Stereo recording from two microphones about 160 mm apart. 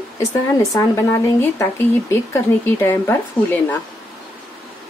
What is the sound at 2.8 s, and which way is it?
Speech, 10° left (ahead or behind).